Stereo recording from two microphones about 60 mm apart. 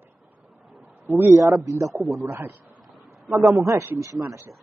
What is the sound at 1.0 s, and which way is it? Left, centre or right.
Speech, right.